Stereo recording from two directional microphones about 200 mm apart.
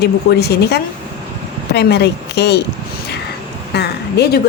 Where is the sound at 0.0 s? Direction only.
55° left (ahead or behind).